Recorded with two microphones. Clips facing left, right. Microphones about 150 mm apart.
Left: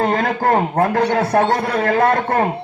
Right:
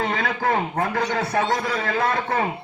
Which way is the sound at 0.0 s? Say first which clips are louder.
Left 6 dB; 50° left (ahead or behind).